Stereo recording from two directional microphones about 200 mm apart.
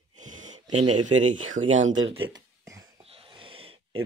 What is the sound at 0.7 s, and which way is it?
Speech, 35° right (ahead or behind).